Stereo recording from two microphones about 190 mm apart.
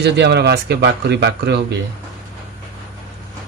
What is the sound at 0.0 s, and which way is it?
Speech, 65° right (ahead or behind).